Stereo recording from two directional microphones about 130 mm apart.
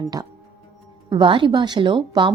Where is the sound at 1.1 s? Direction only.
40° right (ahead or behind).